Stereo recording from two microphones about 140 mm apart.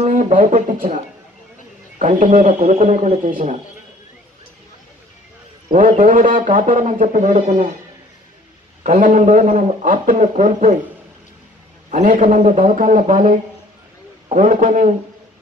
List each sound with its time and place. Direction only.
0.1 s a man's voice: 65° right (ahead or behind)
5.7 s a man's voice: 75° right (ahead or behind); by 7.5 s 60° right (ahead or behind)
8.8 s a man's voice: 65° right (ahead or behind)
11.9 s a man's voice: 65° right (ahead or behind)